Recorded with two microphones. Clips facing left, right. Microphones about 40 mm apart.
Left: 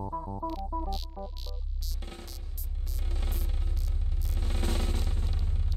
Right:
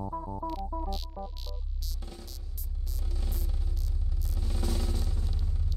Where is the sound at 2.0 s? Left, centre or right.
Left.